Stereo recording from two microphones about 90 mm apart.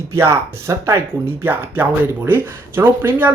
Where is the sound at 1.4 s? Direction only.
20° right (ahead or behind).